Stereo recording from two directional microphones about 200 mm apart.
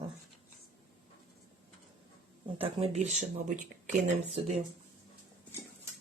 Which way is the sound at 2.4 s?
30° right (ahead or behind).